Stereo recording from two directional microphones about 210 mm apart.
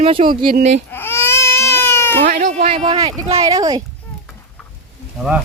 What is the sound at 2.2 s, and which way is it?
Speech, 35° right (ahead or behind).